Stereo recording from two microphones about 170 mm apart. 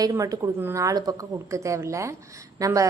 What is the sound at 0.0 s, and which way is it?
A woman's voice, 20° right (ahead or behind).